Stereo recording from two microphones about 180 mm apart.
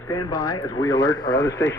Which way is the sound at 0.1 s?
20° left (ahead or behind).